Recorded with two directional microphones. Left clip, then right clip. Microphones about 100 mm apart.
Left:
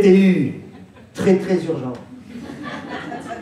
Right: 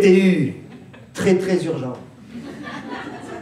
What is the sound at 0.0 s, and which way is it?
A man's voice, 50° right (ahead or behind).